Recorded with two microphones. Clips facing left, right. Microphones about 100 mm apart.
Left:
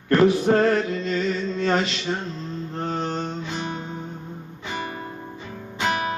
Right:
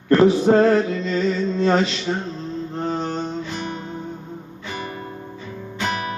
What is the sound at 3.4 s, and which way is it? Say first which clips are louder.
Music: right 1 dB; 20° left (ahead or behind).